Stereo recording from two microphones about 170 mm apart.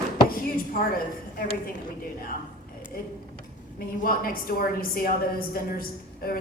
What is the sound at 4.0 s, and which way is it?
A woman's voice, 60° left (ahead or behind).